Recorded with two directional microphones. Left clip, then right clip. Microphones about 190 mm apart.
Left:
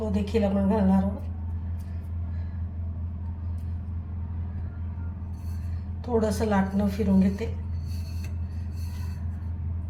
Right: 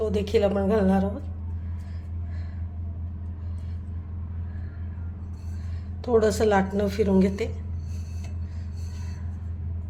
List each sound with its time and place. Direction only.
0.1 s speech: 65° right (ahead or behind)
6.1 s a woman's voice: 65° right (ahead or behind)